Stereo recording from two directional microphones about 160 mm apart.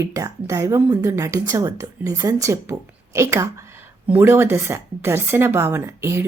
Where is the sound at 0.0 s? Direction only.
20° right (ahead or behind).